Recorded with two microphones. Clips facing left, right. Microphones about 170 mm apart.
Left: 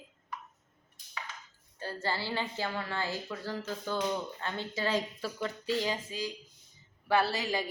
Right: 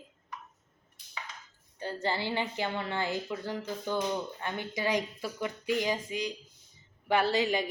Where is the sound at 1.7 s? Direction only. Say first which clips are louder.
Right 3 dB; 20° right (ahead or behind).